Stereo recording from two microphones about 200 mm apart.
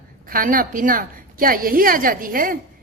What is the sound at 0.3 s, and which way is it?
A woman's voice, 45° right (ahead or behind).